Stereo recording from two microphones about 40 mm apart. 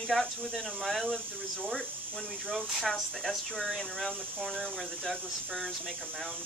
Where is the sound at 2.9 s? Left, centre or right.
Centre.